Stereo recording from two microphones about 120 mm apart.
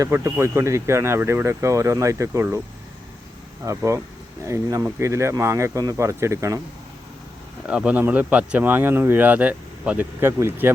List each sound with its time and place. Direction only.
0.0 s speech: 20° right (ahead or behind)
3.6 s speech: 25° right (ahead or behind)
7.7 s speech: 10° right (ahead or behind)